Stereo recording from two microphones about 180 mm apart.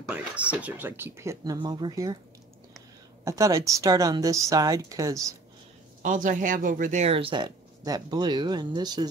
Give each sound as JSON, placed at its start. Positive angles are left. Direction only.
{"t": 0.1, "sound": "speech", "side_deg": -5}
{"t": 3.3, "sound": "speech", "side_deg": -15}
{"t": 6.0, "sound": "a woman's voice", "side_deg": -45}